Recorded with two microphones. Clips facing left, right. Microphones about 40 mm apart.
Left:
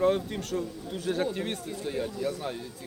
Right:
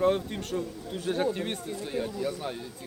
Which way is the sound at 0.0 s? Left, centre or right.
Centre.